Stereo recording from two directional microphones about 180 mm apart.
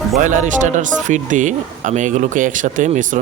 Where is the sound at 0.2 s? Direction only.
45° right (ahead or behind).